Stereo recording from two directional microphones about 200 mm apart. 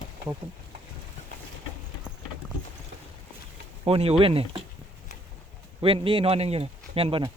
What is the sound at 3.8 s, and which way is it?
Speech, 30° right (ahead or behind).